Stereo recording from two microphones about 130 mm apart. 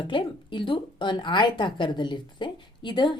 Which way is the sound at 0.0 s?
40° left (ahead or behind).